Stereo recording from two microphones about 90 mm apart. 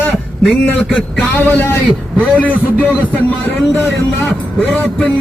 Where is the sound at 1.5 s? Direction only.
20° left (ahead or behind).